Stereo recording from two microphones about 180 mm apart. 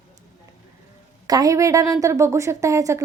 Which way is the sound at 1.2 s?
20° right (ahead or behind).